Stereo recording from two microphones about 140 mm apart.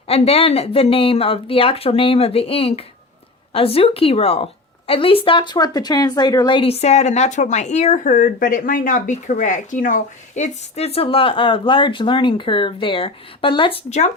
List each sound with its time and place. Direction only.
0.1 s a woman's voice: 45° left (ahead or behind)